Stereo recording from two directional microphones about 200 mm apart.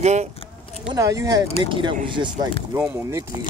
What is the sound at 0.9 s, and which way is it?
Speech, 15° right (ahead or behind).